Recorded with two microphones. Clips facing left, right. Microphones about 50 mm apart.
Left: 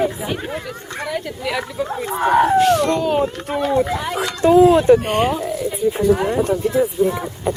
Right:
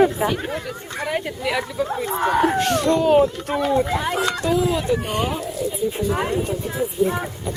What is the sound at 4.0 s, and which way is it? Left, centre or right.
Speech, centre.